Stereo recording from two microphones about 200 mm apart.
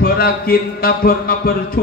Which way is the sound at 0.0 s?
50° left (ahead or behind).